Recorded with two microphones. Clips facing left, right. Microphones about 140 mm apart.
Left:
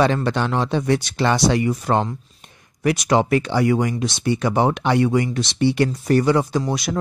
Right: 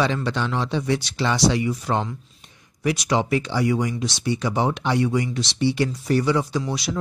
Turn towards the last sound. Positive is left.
turn(degrees=50)  # may be behind; listen again after turning